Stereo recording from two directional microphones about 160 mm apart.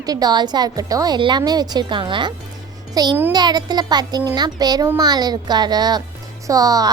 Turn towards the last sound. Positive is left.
turn(degrees=-25)  # may be behind; listen again after turning